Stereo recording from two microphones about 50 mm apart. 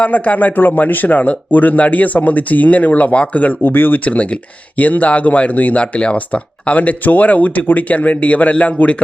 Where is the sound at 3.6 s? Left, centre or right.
Left.